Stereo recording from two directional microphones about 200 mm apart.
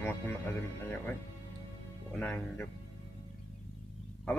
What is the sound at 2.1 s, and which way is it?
Speech, 10° left (ahead or behind).